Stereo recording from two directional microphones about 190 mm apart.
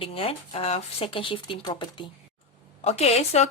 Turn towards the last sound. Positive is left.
turn(degrees=35)  # may be behind; listen again after turning